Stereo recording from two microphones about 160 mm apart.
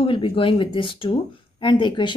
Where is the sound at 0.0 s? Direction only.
35° left (ahead or behind).